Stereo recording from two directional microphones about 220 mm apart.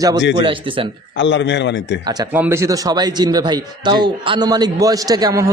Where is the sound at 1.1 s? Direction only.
55° left (ahead or behind).